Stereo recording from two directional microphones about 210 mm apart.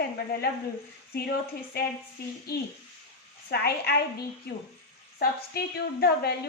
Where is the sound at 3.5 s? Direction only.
50° left (ahead or behind).